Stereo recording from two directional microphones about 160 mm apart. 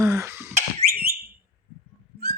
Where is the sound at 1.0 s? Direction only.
70° right (ahead or behind).